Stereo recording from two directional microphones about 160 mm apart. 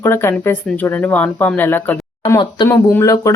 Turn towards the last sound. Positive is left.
turn(degrees=20)  # may be behind; listen again after turning